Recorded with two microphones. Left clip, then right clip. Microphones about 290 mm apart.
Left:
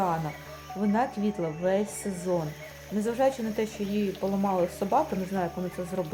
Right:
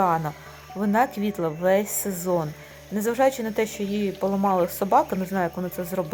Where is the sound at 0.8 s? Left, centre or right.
Centre.